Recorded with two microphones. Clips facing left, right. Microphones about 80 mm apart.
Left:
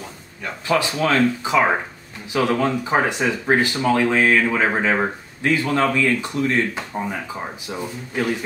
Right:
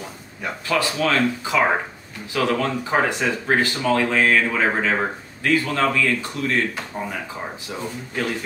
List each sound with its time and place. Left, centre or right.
0.7 s speech: centre